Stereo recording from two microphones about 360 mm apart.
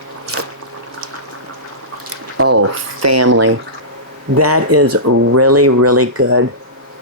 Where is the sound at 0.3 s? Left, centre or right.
Right.